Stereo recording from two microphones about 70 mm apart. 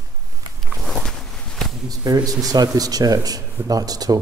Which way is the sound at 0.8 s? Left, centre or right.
Centre.